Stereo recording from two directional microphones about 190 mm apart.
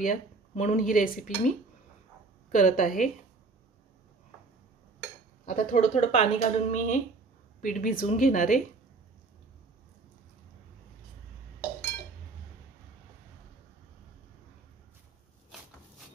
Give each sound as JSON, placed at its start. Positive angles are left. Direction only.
{"t": 0.0, "sound": "speech", "side_deg": 45}
{"t": 2.5, "sound": "speech", "side_deg": 45}
{"t": 5.4, "sound": "a woman's voice", "side_deg": 45}